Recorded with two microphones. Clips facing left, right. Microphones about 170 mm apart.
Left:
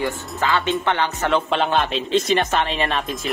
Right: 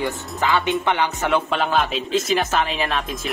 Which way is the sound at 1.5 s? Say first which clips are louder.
Left 1 dB; centre (ahead or behind).